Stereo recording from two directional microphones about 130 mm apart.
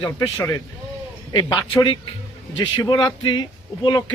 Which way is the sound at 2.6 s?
35° left (ahead or behind).